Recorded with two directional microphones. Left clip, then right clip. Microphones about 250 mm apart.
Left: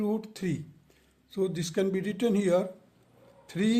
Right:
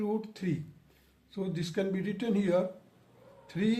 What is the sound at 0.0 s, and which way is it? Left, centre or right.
A man's voice, left.